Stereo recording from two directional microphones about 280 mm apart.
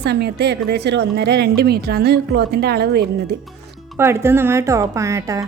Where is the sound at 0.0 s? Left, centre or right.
Right.